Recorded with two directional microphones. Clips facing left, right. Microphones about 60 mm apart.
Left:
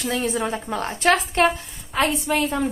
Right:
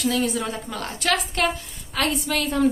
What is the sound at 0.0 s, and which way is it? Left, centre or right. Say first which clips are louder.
A woman's voice: even; left.